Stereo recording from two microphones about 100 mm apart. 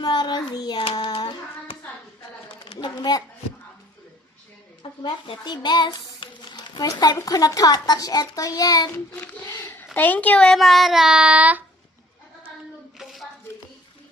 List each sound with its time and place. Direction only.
0.0 s child singing: 45° left (ahead or behind)
1.2 s hands: 45° left (ahead or behind)
2.8 s child singing: 45° left (ahead or behind)
4.8 s speech: 55° left (ahead or behind)
5.4 s a sound: 45° left (ahead or behind)
6.8 s a child's voice: 40° left (ahead or behind)
9.1 s a child's voice: 20° left (ahead or behind); by 11.6 s 15° right (ahead or behind)
13.0 s a sound: centre (ahead or behind)